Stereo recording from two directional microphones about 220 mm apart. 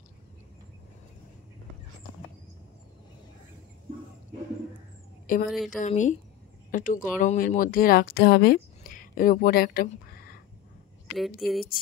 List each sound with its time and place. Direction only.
5.3 s a woman's voice: 40° left (ahead or behind)
11.1 s speech: centre (ahead or behind)